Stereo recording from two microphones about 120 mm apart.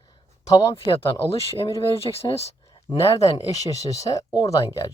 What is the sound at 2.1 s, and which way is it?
Speech, 40° left (ahead or behind).